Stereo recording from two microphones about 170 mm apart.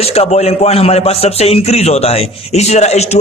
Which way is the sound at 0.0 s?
35° left (ahead or behind).